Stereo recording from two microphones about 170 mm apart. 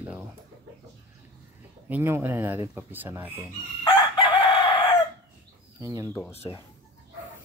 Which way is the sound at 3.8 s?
30° left (ahead or behind).